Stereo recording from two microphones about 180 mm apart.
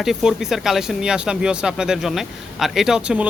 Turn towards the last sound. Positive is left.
turn(degrees=-5)  # may be behind; listen again after turning